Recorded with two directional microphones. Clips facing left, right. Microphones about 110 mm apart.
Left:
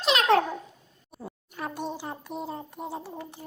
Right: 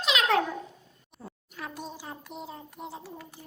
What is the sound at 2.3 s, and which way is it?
Speech, 40° left (ahead or behind).